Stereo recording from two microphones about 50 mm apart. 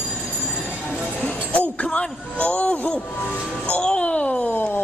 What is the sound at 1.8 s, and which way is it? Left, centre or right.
Speech, left.